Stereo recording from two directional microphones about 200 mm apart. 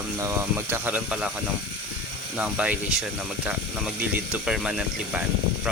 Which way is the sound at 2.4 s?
5° right (ahead or behind).